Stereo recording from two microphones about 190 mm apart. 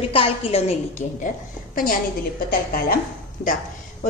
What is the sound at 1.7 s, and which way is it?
Speech, 45° left (ahead or behind).